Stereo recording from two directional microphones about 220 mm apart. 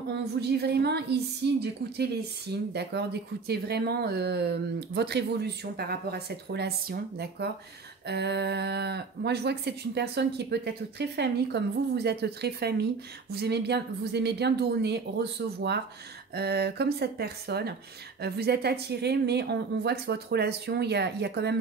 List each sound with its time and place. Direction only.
0.1 s a woman's voice: 50° right (ahead or behind)